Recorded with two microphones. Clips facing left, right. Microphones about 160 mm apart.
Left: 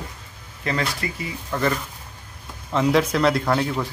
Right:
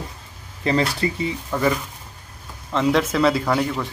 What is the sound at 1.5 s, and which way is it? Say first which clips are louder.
Speech: right 1 dB; 5° right (ahead or behind).